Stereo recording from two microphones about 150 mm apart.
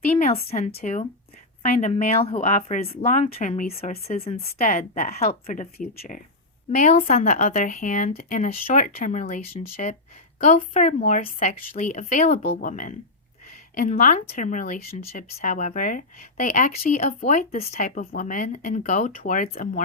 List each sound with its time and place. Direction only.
0.2 s a woman's voice: 45° left (ahead or behind)
3.7 s a woman's voice: 45° left (ahead or behind)
5.7 s speech: 75° left (ahead or behind)
6.7 s a woman's voice: 50° left (ahead or behind)
12.4 s speech: 80° left; by 19.8 s 60° left (ahead or behind)